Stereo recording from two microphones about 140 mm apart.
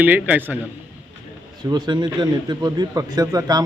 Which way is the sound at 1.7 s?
30° right (ahead or behind).